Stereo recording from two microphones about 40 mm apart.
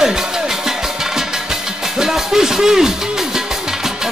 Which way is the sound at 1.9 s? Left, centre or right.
Centre.